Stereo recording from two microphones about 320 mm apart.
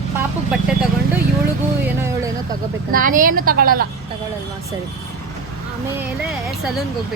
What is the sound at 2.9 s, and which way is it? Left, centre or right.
Speech, right.